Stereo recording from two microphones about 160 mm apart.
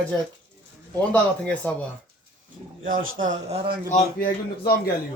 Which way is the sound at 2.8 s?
60° right (ahead or behind).